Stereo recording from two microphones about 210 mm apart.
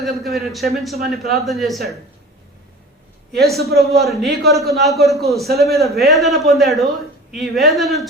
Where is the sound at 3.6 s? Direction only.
45° right (ahead or behind).